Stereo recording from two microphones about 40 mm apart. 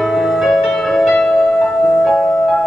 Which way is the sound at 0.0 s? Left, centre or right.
Centre.